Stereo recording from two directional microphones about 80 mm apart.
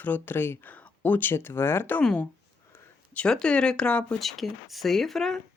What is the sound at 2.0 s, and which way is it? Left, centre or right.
Speech, centre.